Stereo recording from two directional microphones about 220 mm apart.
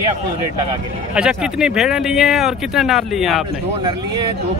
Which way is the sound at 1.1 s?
5° right (ahead or behind).